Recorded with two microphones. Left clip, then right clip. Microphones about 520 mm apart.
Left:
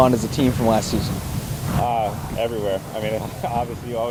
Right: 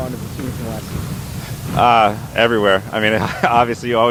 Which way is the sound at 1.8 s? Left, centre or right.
Right.